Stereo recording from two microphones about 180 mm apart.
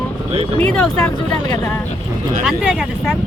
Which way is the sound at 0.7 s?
5° left (ahead or behind).